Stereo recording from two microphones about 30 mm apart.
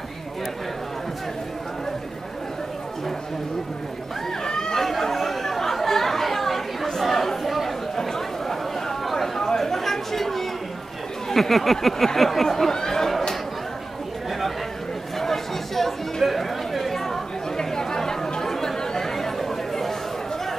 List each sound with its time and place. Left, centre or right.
4.5 s chatter: left
4.7 s chatter: centre
7.9 s a sound: centre
11.2 s speech: centre
15.1 s chatter: centre